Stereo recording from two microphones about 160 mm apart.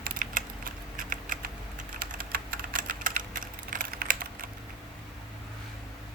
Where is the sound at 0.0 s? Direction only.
60° right (ahead or behind).